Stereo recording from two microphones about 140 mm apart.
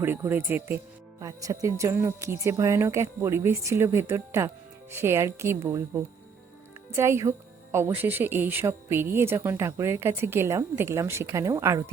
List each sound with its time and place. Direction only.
0.0 s speech: 15° right (ahead or behind)